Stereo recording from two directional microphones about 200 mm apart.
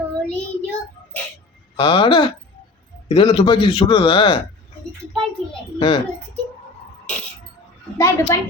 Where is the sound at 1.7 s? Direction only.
25° left (ahead or behind).